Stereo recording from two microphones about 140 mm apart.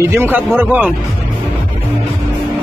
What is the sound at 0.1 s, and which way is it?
Speech, 20° right (ahead or behind).